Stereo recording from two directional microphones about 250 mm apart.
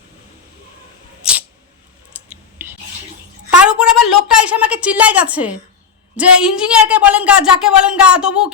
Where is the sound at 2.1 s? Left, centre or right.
Centre.